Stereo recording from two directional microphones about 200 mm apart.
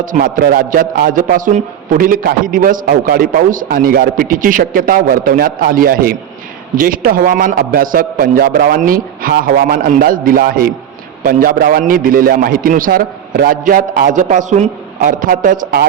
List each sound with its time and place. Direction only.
0.0 s speech: 45° right (ahead or behind)